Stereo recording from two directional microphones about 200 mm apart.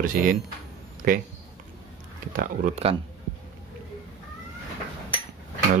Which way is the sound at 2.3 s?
40° right (ahead or behind).